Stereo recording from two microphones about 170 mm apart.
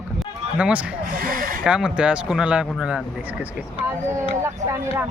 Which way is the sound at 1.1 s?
55° right (ahead or behind).